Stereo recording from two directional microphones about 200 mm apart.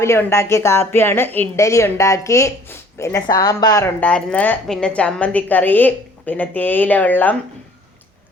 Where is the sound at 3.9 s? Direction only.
5° left (ahead or behind).